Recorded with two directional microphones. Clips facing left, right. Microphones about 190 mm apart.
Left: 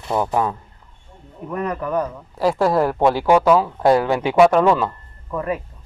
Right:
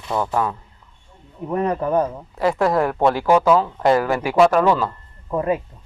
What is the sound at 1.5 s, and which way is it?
Speech, 30° right (ahead or behind).